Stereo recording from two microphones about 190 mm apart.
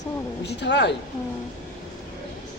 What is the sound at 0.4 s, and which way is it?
Speech, 65° left (ahead or behind).